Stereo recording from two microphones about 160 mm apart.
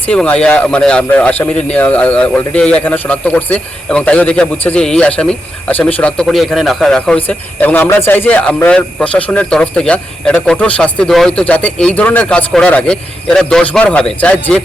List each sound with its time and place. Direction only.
0.0 s speech: 10° left (ahead or behind)